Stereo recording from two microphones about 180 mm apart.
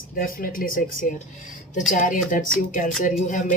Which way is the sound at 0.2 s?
55° left (ahead or behind).